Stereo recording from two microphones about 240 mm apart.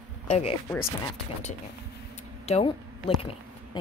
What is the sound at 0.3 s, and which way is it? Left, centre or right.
Speech, left.